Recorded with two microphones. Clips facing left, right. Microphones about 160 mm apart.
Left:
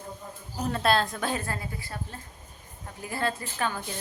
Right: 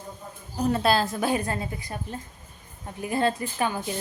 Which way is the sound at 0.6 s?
5° right (ahead or behind).